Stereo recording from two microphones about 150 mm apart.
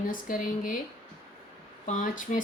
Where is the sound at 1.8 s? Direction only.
60° left (ahead or behind).